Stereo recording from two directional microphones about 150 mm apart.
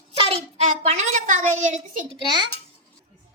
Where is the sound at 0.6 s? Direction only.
55° right (ahead or behind).